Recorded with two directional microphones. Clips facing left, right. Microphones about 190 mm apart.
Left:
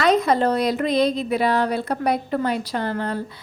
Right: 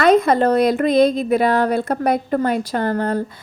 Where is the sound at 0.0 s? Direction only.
50° right (ahead or behind).